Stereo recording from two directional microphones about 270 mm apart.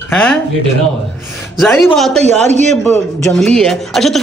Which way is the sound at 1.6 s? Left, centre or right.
Centre.